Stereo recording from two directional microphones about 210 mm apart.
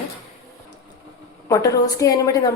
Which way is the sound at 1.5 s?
15° left (ahead or behind).